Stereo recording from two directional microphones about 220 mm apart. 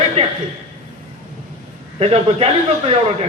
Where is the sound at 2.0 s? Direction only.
25° right (ahead or behind).